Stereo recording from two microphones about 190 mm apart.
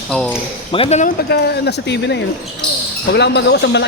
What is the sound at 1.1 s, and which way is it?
Speech, 60° left (ahead or behind).